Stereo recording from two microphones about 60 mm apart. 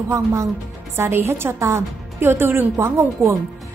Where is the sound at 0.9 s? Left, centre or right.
Right.